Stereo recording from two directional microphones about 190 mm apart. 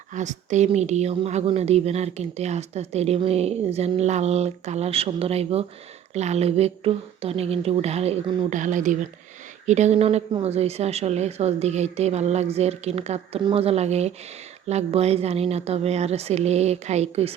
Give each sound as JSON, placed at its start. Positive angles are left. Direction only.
{"t": 0.1, "sound": "a woman's voice", "side_deg": -40}